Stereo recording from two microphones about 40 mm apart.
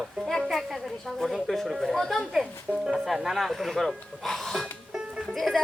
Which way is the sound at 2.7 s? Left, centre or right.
Right.